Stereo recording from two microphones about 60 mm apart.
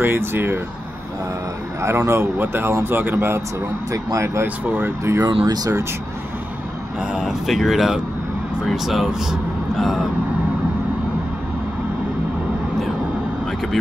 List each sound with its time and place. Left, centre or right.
0.0 s speech: right
1.8 s speech: right
2.3 s speech: right
3.9 s speech: right
4.4 s speech: right
5.1 s speech: right
7.0 s speech: centre